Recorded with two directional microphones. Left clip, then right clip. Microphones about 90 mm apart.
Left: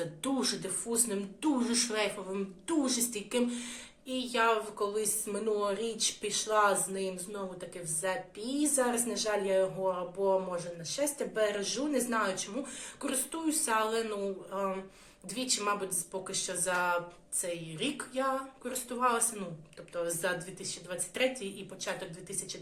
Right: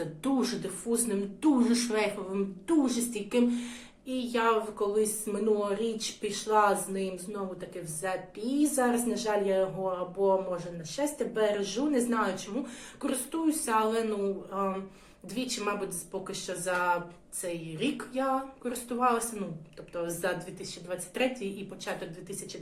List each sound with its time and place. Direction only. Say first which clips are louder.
0.2 s speech: right 4 dB; 20° left (ahead or behind)
1.4 s speech: right 4 dB; 5° left (ahead or behind)